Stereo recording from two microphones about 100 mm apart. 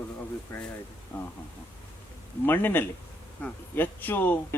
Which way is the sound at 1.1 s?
20° left (ahead or behind).